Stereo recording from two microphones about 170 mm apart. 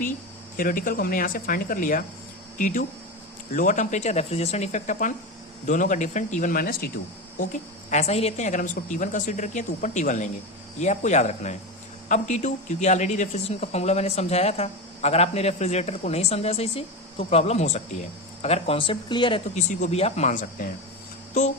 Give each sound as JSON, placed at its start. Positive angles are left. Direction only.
{"t": 0.5, "sound": "a woman's voice", "side_deg": 55}
{"t": 7.9, "sound": "a woman's voice", "side_deg": 40}
{"t": 19.5, "sound": "a woman's voice", "side_deg": 45}